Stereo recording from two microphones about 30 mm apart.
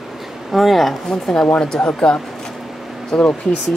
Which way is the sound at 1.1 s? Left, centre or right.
Left.